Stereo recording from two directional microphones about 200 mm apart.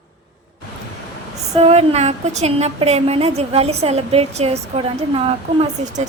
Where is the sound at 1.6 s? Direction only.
30° right (ahead or behind).